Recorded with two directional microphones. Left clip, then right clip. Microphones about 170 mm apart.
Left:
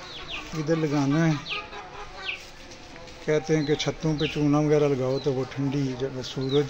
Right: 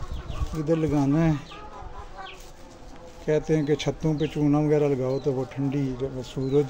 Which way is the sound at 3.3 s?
20° right (ahead or behind).